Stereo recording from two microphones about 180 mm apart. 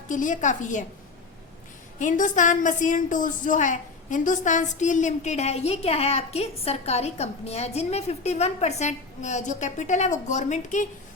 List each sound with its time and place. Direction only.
0.1 s a woman's voice: 45° left (ahead or behind)
2.0 s a woman's voice: 45° left (ahead or behind)